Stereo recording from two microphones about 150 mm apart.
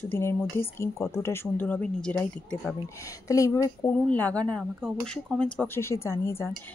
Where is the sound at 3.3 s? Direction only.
20° left (ahead or behind).